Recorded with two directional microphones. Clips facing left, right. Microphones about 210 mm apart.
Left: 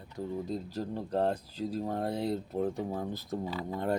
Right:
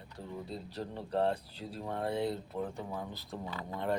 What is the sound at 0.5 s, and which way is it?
Speech, 40° left (ahead or behind).